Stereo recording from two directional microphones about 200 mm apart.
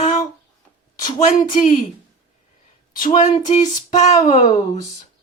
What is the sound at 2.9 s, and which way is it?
Child singing, 40° left (ahead or behind).